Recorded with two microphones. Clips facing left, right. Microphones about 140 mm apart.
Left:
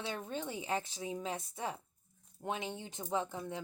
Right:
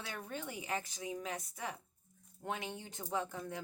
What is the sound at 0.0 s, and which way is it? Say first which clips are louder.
A woman's voice: left 4 dB; 25° left (ahead or behind).